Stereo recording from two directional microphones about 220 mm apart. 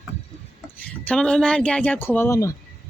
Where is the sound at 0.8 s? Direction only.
5° left (ahead or behind).